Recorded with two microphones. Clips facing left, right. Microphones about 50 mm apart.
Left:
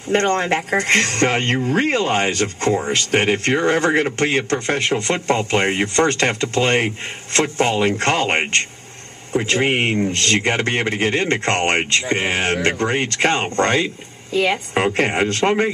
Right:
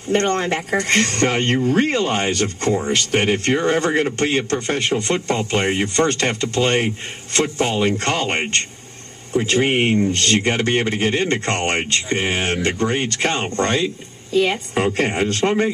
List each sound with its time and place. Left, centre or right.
0.1 s speech: left
2.7 s speech: left
3.1 s a woman's voice: left